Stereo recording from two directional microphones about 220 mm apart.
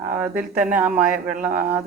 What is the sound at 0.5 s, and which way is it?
Speech, 40° right (ahead or behind).